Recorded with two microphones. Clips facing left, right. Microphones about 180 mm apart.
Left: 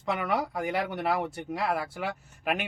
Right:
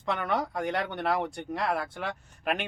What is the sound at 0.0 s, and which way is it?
Speech, 5° left (ahead or behind).